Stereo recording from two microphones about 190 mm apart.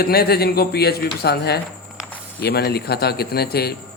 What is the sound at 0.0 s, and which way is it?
Speech, 55° left (ahead or behind).